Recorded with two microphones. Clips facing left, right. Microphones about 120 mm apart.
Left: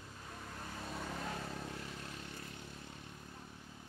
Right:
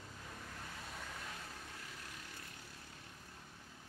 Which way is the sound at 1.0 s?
45° left (ahead or behind).